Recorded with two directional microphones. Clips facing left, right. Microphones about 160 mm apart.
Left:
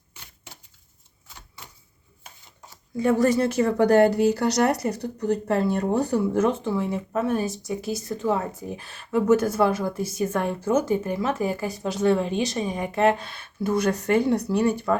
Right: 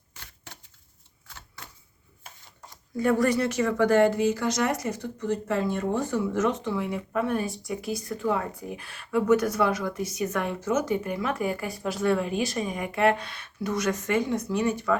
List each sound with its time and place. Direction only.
3.0 s a woman's voice: 25° left (ahead or behind)